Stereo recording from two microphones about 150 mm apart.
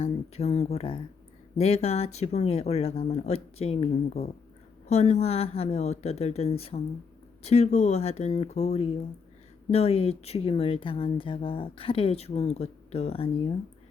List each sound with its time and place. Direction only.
0.0 s speech: 45° left (ahead or behind)